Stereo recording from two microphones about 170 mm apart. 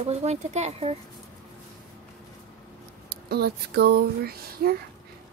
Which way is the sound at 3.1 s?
70° right (ahead or behind).